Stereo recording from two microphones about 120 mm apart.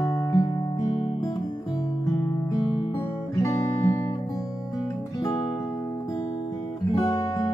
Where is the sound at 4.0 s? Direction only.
30° left (ahead or behind).